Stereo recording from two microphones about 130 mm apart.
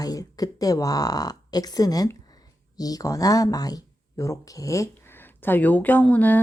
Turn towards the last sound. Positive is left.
turn(degrees=10)  # may be behind; listen again after turning